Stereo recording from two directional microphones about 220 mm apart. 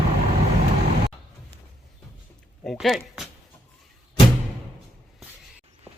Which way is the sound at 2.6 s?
Centre (ahead or behind).